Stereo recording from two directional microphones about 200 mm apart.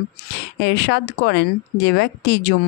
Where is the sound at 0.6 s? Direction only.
60° left (ahead or behind).